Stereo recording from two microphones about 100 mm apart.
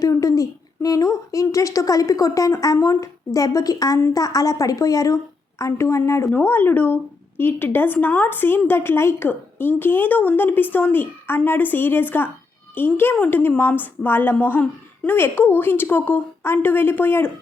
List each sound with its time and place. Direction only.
0.0 s a woman's voice: 35° left (ahead or behind)
6.3 s a woman's voice: 20° left (ahead or behind)